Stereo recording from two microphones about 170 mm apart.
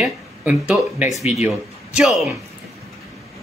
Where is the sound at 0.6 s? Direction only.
5° right (ahead or behind).